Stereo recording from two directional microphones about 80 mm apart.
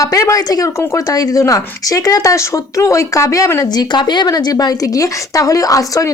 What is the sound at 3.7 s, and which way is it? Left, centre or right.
A woman's voice, left.